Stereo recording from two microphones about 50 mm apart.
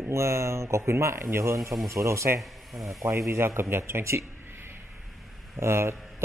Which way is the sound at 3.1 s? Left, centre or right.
Right.